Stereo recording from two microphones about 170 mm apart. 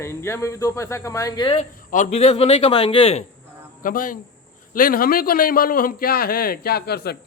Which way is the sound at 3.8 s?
55° left (ahead or behind).